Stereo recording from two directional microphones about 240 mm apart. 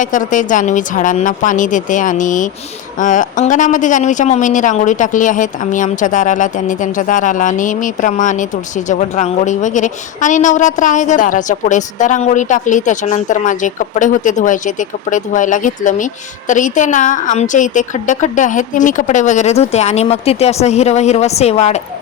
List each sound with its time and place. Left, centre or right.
0.0 s a man's voice: left